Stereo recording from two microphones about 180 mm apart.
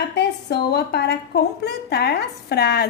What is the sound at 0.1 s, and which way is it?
A woman's voice, 65° left (ahead or behind).